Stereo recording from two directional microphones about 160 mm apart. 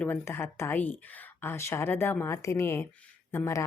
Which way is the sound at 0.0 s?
15° left (ahead or behind).